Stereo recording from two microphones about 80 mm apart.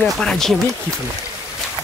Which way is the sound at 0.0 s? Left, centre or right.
Centre.